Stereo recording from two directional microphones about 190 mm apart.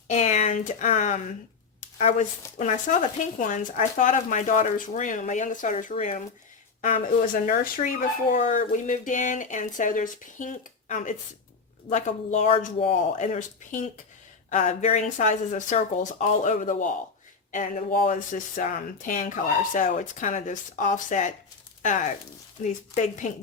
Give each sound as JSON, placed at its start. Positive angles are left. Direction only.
{"t": 0.1, "sound": "speech", "side_deg": 40}
{"t": 7.4, "sound": "speech", "side_deg": 50}